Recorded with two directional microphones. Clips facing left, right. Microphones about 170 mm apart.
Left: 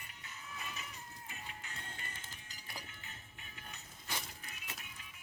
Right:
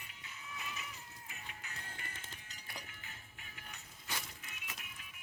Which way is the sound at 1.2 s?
30° left (ahead or behind).